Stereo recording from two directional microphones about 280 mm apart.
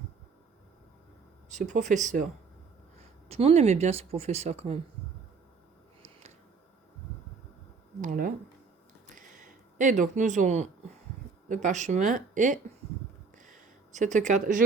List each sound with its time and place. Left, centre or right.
1.5 s speech: right
3.2 s speech: right
8.0 s speech: right
9.0 s a sound: right
11.4 s speech: right
13.4 s a sound: right